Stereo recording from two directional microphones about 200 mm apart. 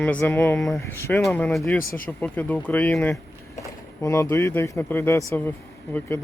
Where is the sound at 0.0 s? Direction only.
5° left (ahead or behind).